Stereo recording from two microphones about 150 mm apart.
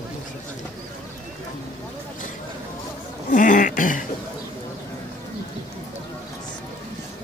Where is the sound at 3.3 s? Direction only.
60° left (ahead or behind).